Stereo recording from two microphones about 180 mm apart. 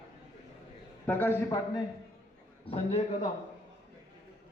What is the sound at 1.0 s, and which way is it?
Speech, 10° left (ahead or behind).